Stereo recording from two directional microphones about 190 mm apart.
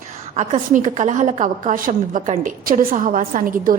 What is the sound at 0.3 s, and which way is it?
A woman's voice, 40° right (ahead or behind).